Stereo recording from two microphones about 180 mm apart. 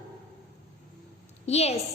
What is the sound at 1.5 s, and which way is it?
Speech, 35° left (ahead or behind).